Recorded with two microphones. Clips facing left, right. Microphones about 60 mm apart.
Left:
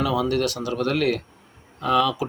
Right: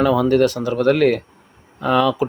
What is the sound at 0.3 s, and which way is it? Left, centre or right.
Speech, right.